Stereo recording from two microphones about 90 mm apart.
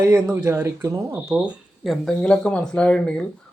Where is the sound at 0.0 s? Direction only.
30° right (ahead or behind).